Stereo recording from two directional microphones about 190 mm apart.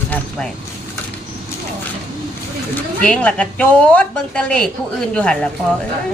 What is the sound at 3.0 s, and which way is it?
A woman's voice, 5° left (ahead or behind).